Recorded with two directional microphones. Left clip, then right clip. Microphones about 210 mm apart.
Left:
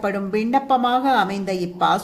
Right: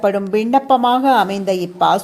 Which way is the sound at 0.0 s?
25° right (ahead or behind).